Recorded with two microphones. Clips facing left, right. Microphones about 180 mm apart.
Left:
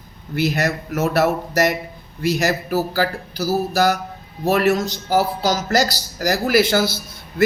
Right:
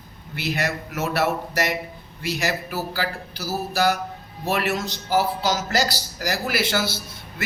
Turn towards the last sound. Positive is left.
turn(degrees=40)  # may be behind; listen again after turning